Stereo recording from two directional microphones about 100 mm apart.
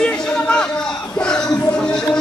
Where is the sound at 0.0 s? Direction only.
10° left (ahead or behind).